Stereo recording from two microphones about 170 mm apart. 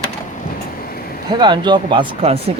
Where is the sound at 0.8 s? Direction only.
60° left (ahead or behind).